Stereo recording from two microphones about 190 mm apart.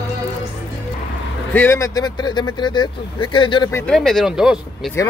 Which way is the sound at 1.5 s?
10° left (ahead or behind).